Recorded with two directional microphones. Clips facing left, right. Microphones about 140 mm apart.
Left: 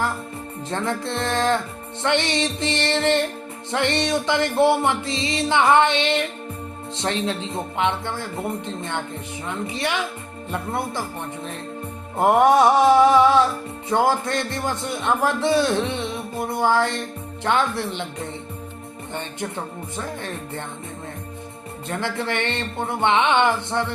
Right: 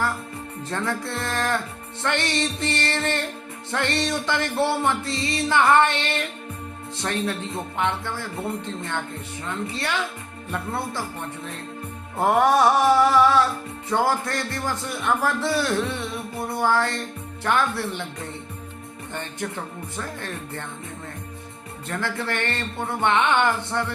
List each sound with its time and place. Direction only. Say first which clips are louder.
0.7 s a man's voice: left 2 dB; 20° left (ahead or behind)
12.1 s a man's voice: left 3 dB; 20° left (ahead or behind)
19.1 s a man's voice: left 2 dB; 20° left (ahead or behind)
21.8 s a man's voice: left 2 dB; 20° left (ahead or behind)